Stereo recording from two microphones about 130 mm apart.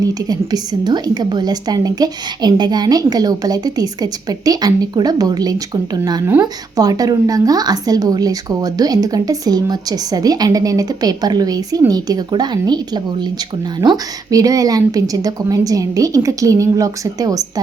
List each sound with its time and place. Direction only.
0.0 s a woman's voice: 30° right (ahead or behind)